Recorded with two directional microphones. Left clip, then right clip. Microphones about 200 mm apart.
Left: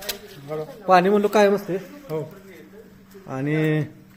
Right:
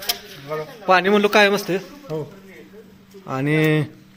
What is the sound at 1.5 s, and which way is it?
Speech, 20° right (ahead or behind).